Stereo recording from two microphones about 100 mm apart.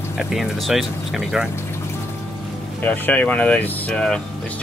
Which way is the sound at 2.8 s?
15° left (ahead or behind).